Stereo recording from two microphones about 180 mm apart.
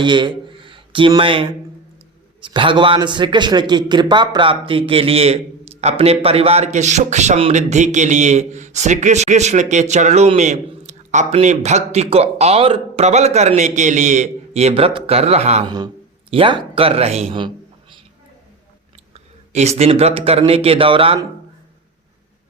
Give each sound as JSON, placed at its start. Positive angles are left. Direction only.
{"t": 0.0, "sound": "a man's voice", "side_deg": -25}
{"t": 15.6, "sound": "a man's voice", "side_deg": -25}
{"t": 19.1, "sound": "speech", "side_deg": -35}